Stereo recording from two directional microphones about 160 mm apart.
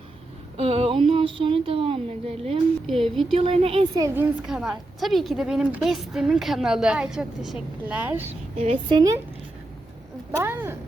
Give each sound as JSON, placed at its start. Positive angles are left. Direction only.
{"t": 0.5, "sound": "speech", "side_deg": -35}
{"t": 2.8, "sound": "a woman's voice", "side_deg": 0}
{"t": 3.3, "sound": "a woman's voice", "side_deg": -35}
{"t": 3.9, "sound": "speech", "side_deg": -15}
{"t": 4.4, "sound": "a woman's voice", "side_deg": -5}
{"t": 8.3, "sound": "a woman's voice", "side_deg": -40}
{"t": 10.3, "sound": "speech", "side_deg": -15}